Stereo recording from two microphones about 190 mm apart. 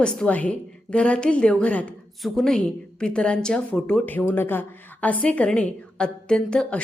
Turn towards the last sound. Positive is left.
turn(degrees=5)  # may be behind; listen again after turning